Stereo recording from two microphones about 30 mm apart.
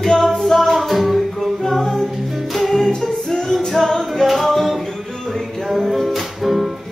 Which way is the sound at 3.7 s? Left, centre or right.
Centre.